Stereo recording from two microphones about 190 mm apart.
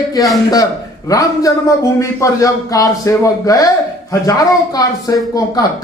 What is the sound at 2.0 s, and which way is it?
A man's voice, 15° left (ahead or behind).